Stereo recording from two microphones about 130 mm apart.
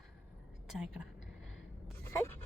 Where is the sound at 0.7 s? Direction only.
5° right (ahead or behind).